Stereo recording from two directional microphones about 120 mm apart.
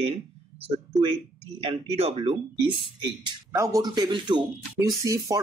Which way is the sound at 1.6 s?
50° right (ahead or behind).